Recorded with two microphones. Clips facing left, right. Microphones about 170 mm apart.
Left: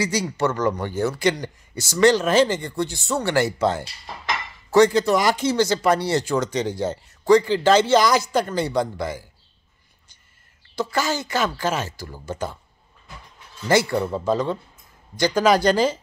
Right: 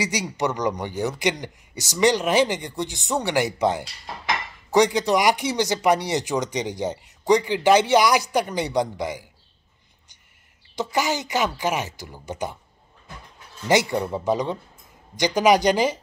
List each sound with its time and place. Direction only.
0.0 s speech: 15° right (ahead or behind)
10.8 s speech: 15° right (ahead or behind)
13.7 s speech: 15° right (ahead or behind)